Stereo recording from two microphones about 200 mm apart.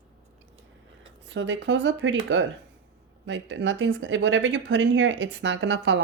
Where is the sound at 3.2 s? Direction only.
65° right (ahead or behind).